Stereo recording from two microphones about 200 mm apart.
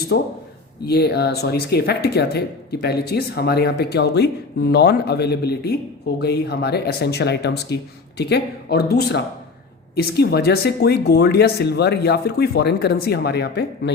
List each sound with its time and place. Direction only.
0.1 s speech: 60° left (ahead or behind)